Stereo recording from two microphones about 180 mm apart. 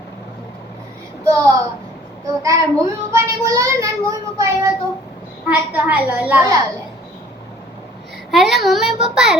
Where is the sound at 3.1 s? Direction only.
15° right (ahead or behind).